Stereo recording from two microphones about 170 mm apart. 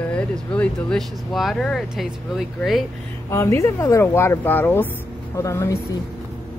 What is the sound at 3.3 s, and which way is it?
Speech, 15° left (ahead or behind).